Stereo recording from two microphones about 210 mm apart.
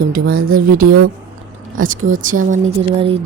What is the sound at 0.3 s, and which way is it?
Speech, 90° right.